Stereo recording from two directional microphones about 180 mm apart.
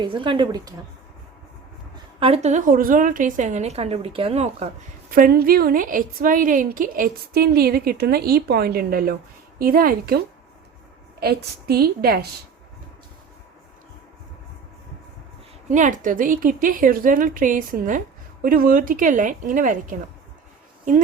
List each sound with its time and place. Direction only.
0.0 s speech: 30° right (ahead or behind)
2.1 s a woman's voice: 35° right (ahead or behind)
5.1 s a woman's voice: 55° right (ahead or behind)
11.7 s a woman's voice: 60° right (ahead or behind)
15.7 s a woman's voice: 45° right (ahead or behind)